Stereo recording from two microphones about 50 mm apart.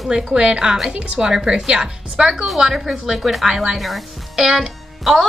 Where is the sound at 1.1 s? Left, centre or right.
Centre.